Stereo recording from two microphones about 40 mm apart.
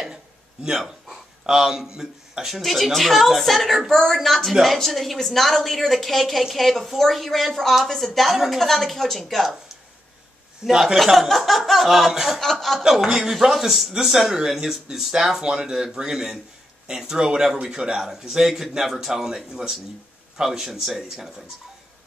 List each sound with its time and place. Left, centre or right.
0.7 s speech: centre
10.6 s speech: centre
11.0 s speech: centre
12.4 s speech: centre
12.8 s speech: centre